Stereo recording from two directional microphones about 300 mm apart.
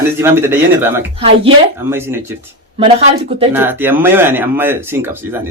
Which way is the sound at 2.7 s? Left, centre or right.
Centre.